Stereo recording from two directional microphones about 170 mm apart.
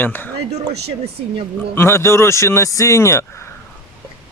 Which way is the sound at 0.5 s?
40° right (ahead or behind).